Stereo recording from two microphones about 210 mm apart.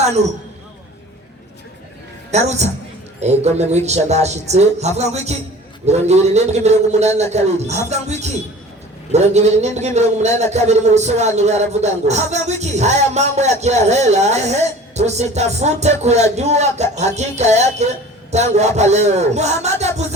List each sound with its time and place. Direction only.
0.0 s a man's voice: 30° right (ahead or behind)
2.3 s a man's voice: 30° right (ahead or behind)
9.1 s a man's voice: 30° right (ahead or behind)